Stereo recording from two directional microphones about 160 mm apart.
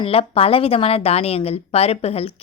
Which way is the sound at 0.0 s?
35° left (ahead or behind).